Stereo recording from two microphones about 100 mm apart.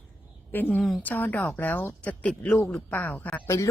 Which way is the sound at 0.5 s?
20° left (ahead or behind).